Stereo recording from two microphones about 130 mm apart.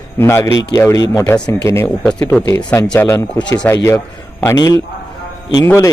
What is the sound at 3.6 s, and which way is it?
Speech, 20° left (ahead or behind).